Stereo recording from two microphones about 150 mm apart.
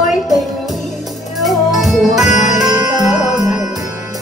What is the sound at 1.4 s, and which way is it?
Music, centre (ahead or behind).